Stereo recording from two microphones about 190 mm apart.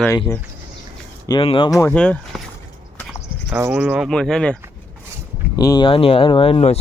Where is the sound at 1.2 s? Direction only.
25° left (ahead or behind).